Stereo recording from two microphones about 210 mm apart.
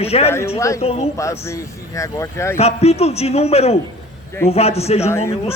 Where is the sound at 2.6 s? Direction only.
30° left (ahead or behind).